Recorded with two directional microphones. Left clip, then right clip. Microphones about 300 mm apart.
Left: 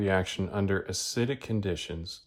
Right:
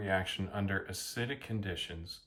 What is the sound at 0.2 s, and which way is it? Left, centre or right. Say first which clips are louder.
Speech: left 6 dB; centre.